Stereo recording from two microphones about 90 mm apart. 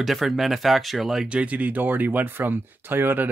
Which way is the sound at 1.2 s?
15° right (ahead or behind).